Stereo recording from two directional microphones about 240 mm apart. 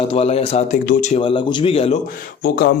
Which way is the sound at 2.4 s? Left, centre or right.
Left.